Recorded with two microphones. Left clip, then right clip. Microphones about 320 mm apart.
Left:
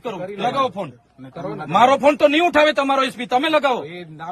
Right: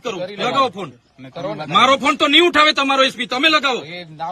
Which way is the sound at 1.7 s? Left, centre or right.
Centre.